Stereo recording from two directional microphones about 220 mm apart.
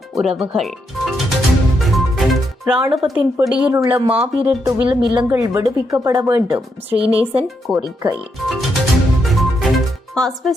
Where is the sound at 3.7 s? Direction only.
15° right (ahead or behind).